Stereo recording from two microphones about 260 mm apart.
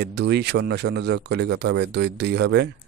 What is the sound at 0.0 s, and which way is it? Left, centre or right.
Speech, right.